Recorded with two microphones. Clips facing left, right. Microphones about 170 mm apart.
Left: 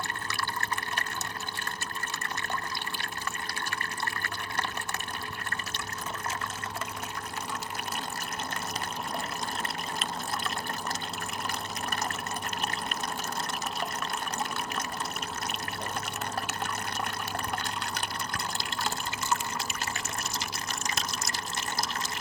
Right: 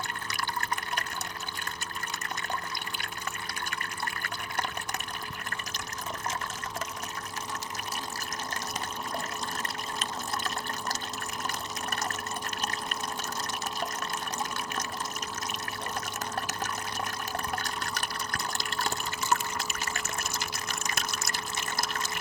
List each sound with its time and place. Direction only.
19.3 s water: 55° right (ahead or behind)